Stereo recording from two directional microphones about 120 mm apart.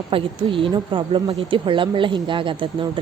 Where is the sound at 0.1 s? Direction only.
45° right (ahead or behind).